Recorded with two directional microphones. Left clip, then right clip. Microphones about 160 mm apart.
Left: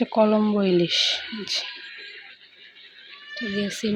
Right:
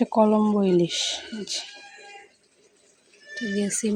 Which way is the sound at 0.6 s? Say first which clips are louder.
Left 2 dB; 20° right (ahead or behind).